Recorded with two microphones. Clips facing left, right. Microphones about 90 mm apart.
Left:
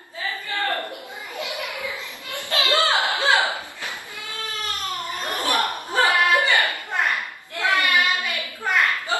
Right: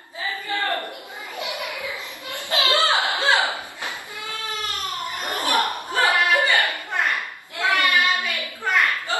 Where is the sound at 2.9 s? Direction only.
20° right (ahead or behind).